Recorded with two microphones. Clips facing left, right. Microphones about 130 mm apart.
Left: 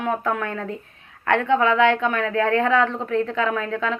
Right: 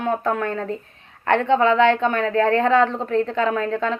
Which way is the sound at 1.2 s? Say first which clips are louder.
Right 2 dB; 30° right (ahead or behind).